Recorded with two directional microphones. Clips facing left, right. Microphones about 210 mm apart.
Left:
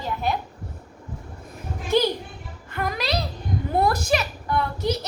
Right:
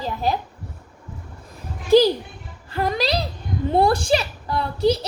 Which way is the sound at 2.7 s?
30° right (ahead or behind).